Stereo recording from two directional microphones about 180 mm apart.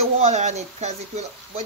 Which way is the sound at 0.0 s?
40° right (ahead or behind).